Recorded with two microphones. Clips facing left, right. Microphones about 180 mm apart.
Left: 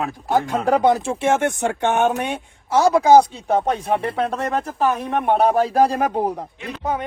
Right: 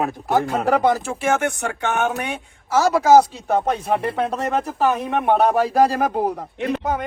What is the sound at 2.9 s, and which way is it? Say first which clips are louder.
Speech: even; 5° right (ahead or behind).